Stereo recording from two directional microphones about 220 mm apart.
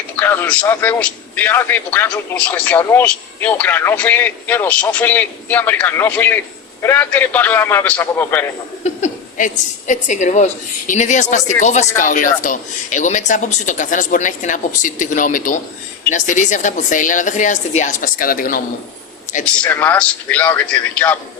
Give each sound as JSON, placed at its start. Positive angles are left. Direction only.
{"t": 0.2, "sound": "a man's voice", "side_deg": 10}
{"t": 8.8, "sound": "speech", "side_deg": 35}
{"t": 19.6, "sound": "a man's voice", "side_deg": 10}